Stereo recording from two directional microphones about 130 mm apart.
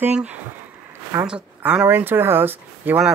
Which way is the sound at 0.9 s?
20° right (ahead or behind).